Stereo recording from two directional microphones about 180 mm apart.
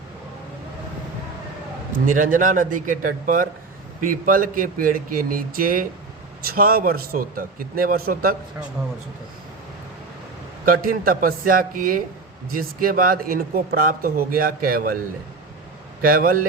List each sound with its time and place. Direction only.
1.9 s speech: 50° right (ahead or behind)
10.7 s speech: 50° right (ahead or behind)
16.0 s speech: 50° right (ahead or behind)